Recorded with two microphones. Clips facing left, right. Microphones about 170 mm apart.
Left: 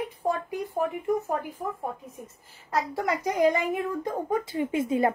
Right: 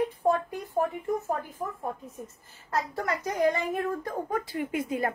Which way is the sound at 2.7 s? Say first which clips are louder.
Left 3 dB; 10° left (ahead or behind).